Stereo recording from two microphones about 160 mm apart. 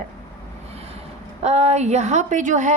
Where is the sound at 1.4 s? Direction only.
45° right (ahead or behind).